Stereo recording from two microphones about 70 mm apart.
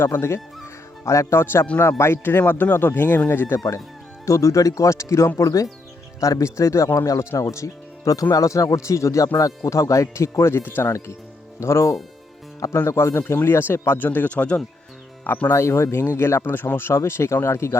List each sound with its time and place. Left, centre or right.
0.0 s speech: left
4.3 s speech: left
11.6 s speech: left
12.5 s speech: left
12.8 s speech: left
15.5 s speech: left